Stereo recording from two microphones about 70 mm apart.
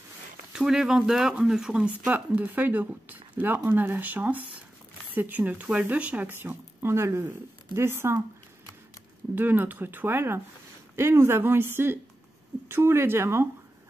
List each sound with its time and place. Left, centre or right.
0.5 s speech: centre; by 8.2 s right
9.3 s speech: right